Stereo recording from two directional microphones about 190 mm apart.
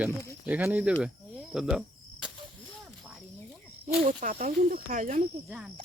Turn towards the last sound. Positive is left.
turn(degrees=-5)  # may be behind; listen again after turning